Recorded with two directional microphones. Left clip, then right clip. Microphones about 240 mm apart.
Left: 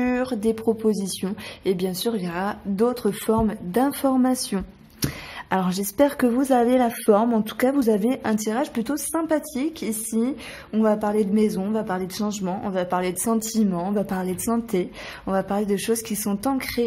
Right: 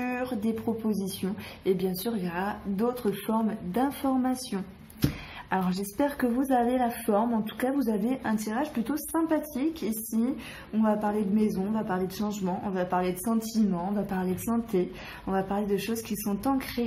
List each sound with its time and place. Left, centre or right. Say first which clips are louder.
0.0 s a woman's voice: left 8 dB; left
10.8 s a woman's voice: left 6 dB; left